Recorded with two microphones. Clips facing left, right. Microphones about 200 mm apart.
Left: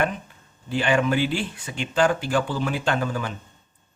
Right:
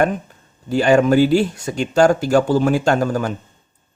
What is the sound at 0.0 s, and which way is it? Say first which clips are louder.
Speech: right 7 dB; 45° right (ahead or behind).